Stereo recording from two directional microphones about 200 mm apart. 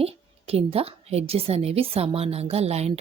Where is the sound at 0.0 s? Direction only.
30° right (ahead or behind).